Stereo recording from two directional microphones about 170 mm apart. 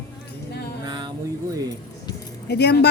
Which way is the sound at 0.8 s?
25° right (ahead or behind).